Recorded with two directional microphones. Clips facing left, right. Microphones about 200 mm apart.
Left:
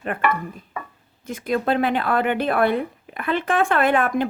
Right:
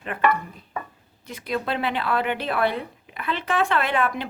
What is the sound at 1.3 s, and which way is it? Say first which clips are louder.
Speech: left 5 dB; 50° left (ahead or behind).